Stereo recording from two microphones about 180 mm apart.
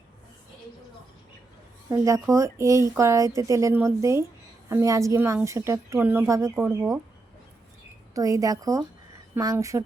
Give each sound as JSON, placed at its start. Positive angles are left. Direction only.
{"t": 1.9, "sound": "speech", "side_deg": -15}
{"t": 8.1, "sound": "speech", "side_deg": -20}